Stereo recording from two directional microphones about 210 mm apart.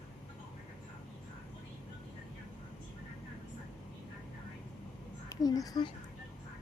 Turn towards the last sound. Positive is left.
turn(degrees=20)  # may be behind; listen again after turning